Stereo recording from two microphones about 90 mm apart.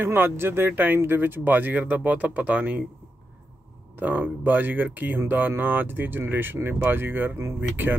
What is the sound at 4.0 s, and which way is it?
Speech, 20° right (ahead or behind).